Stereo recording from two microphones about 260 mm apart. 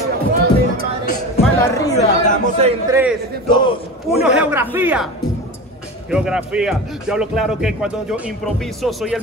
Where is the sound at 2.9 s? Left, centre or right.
Centre.